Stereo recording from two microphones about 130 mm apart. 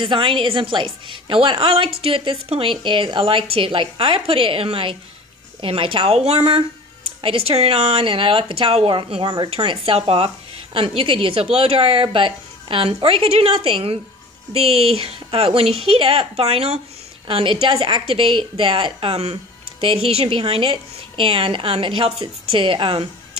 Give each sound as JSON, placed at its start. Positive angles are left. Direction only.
{"t": 0.0, "sound": "a woman's voice", "side_deg": -40}